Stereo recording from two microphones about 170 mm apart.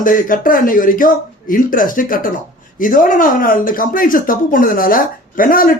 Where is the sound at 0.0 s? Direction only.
55° left (ahead or behind).